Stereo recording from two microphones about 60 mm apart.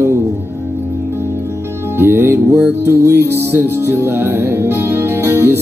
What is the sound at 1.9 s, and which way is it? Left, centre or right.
Music, right.